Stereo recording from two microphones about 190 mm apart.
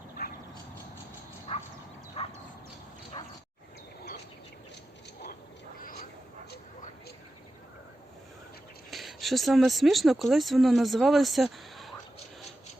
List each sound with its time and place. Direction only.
0.2 s a sound: 50° left (ahead or behind)
1.5 s dog: 30° left (ahead or behind)
2.2 s bow-wow: 35° left (ahead or behind)
8.9 s speech: centre (ahead or behind)